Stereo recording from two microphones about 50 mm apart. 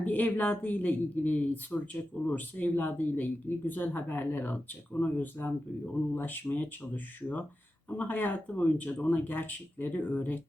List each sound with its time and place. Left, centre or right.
0.0 s speech: left